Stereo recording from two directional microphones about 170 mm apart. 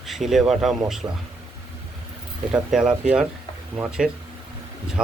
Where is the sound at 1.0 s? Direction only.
20° right (ahead or behind).